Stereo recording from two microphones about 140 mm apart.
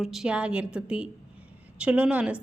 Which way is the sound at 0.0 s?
Centre (ahead or behind).